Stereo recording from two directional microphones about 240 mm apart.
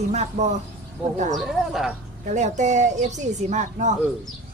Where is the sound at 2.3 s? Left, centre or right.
Right.